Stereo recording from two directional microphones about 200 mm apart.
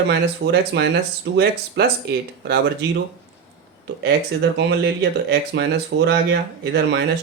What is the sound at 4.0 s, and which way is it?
Speech, 55° right (ahead or behind).